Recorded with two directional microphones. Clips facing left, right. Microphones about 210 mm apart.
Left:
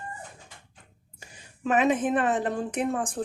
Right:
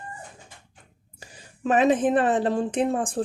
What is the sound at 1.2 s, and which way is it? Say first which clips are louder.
A woman's voice: right 3 dB; 35° right (ahead or behind).